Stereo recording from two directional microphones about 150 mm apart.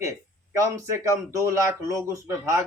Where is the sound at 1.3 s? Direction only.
20° right (ahead or behind).